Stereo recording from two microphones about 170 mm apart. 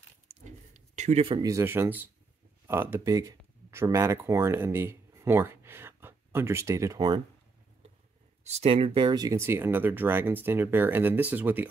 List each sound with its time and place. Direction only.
0.3 s a sound: 45° right (ahead or behind)
1.2 s speech: 30° right (ahead or behind)
1.5 s speech: 15° right (ahead or behind)
8.5 s speech: 35° right (ahead or behind); by 11.6 s 10° right (ahead or behind)